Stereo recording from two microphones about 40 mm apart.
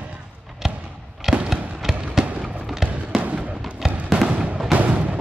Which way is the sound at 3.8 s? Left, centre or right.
Centre.